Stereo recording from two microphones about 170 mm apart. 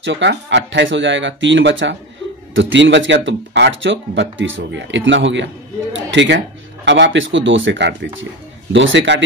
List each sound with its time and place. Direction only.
0.0 s speech: 90° right